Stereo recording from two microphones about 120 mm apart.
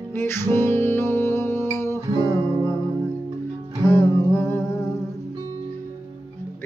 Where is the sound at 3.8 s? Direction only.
20° left (ahead or behind).